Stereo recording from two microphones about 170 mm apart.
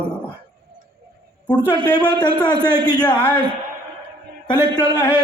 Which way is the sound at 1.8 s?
25° left (ahead or behind).